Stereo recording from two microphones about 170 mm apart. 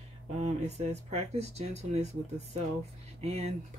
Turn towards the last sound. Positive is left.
turn(degrees=-40)  # may be behind; listen again after turning